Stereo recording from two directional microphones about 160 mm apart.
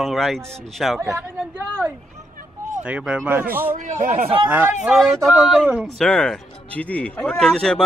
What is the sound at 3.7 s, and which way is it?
Speech, 55° right (ahead or behind).